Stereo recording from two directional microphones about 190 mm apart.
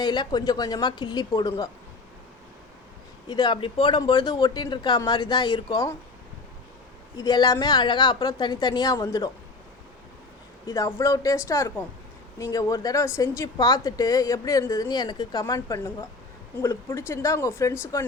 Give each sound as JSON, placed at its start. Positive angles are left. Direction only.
{"t": 0.0, "sound": "a woman's voice", "side_deg": 25}
{"t": 3.2, "sound": "a woman's voice", "side_deg": 20}
{"t": 7.2, "sound": "a woman's voice", "side_deg": 20}
{"t": 10.7, "sound": "a woman's voice", "side_deg": 15}